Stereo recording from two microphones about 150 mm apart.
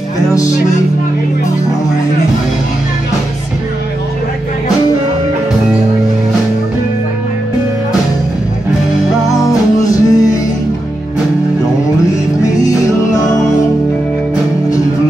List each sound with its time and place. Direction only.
9.4 s music: 25° left (ahead or behind)
12.5 s music: 20° left (ahead or behind)